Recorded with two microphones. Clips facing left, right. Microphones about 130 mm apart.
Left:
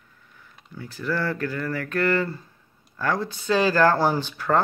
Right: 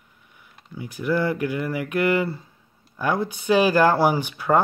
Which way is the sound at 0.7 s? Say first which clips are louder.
Right 4 dB; 15° right (ahead or behind).